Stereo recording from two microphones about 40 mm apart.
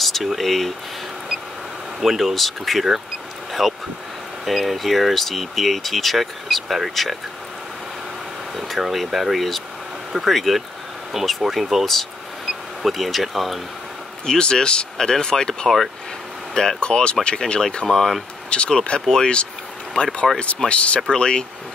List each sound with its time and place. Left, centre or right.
0.0 s speech: centre
2.0 s speech: centre
8.5 s speech: centre
14.2 s speech: centre
18.5 s speech: left
21.1 s speech: centre